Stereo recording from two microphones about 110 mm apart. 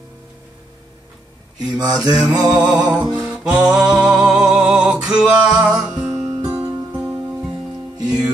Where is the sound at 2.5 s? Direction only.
35° right (ahead or behind).